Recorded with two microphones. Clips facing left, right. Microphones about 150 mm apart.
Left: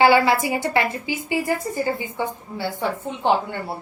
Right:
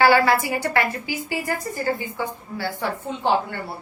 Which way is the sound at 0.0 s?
20° left (ahead or behind).